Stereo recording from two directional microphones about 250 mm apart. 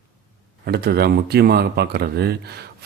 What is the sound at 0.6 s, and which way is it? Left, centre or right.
Speech, right.